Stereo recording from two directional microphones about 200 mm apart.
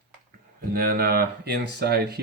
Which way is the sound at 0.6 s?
50° right (ahead or behind).